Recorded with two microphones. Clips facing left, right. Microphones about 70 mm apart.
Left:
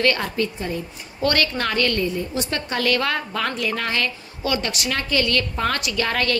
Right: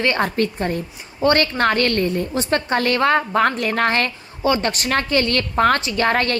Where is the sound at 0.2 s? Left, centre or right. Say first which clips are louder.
Right 5 dB; right.